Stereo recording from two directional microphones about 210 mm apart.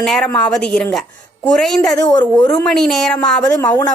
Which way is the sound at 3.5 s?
15° left (ahead or behind).